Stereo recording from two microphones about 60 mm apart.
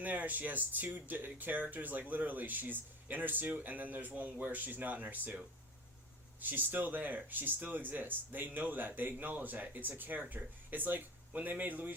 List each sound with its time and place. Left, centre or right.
0.0 s speech: right
6.4 s speech: right